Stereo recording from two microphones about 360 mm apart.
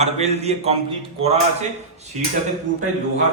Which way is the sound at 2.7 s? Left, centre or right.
Right.